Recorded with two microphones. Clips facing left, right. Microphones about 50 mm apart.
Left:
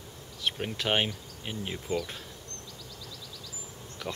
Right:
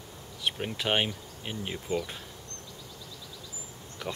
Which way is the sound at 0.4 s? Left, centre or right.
Centre.